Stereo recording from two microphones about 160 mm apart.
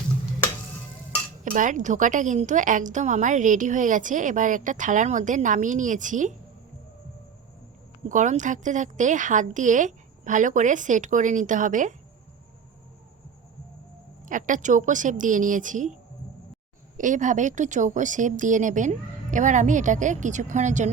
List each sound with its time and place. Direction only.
1.5 s a woman's voice: 55° right (ahead or behind)
8.1 s a woman's voice: 50° right (ahead or behind)
14.3 s a woman's voice: 55° right (ahead or behind)
17.0 s a woman's voice: 50° right (ahead or behind)